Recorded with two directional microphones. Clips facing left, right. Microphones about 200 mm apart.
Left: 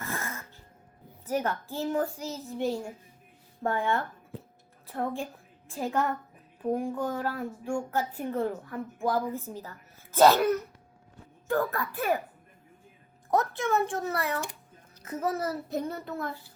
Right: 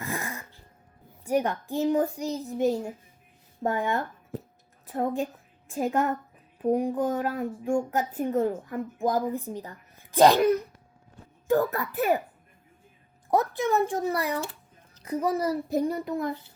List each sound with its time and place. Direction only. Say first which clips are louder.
0.0 s music: right 3 dB; 15° right (ahead or behind)
1.2 s speech: right 4 dB; 15° right (ahead or behind)
3.6 s a woman's voice: right 1 dB; 20° right (ahead or behind)
13.3 s speech: right 2 dB; 20° right (ahead or behind)